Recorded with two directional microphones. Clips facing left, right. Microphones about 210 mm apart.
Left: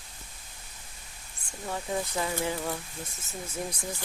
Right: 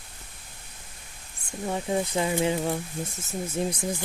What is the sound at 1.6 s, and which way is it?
Speech, 20° right (ahead or behind).